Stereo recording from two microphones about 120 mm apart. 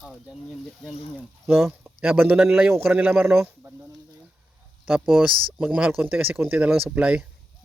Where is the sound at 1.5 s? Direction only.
20° right (ahead or behind).